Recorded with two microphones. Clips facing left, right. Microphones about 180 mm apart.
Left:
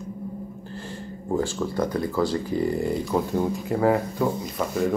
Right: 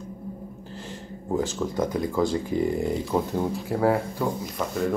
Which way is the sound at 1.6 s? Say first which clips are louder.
Left 1 dB; 5° right (ahead or behind).